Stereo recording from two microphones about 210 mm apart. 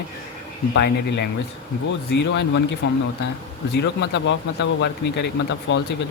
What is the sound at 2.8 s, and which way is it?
Speech, 55° left (ahead or behind).